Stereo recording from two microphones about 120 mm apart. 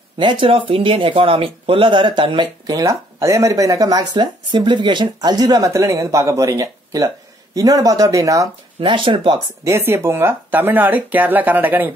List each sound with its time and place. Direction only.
0.2 s speech: 45° right (ahead or behind); by 8.5 s 25° right (ahead or behind)
8.8 s speech: 45° right (ahead or behind)
9.7 s speech: 20° right (ahead or behind)